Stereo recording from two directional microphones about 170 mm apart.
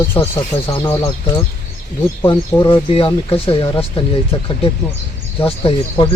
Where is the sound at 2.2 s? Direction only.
15° left (ahead or behind).